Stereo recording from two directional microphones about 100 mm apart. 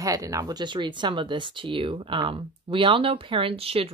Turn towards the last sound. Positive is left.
turn(degrees=-75)  # may be behind; listen again after turning